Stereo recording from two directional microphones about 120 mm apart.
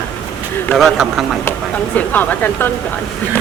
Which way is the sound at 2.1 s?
15° left (ahead or behind).